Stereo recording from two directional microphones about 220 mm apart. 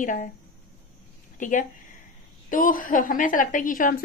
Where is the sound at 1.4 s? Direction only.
35° left (ahead or behind).